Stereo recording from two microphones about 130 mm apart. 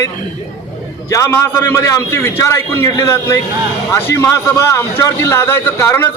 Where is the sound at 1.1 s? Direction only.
25° left (ahead or behind).